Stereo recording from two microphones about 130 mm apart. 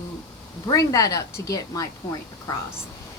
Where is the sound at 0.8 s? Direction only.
25° left (ahead or behind).